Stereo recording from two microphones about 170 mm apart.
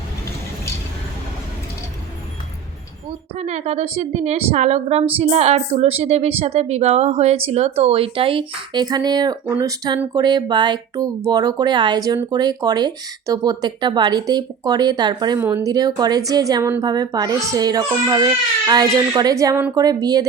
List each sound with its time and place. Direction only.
3.3 s a woman's voice: 40° right (ahead or behind); by 20.2 s 20° right (ahead or behind)